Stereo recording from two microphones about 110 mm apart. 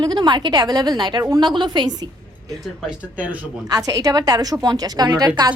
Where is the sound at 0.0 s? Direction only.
40° right (ahead or behind).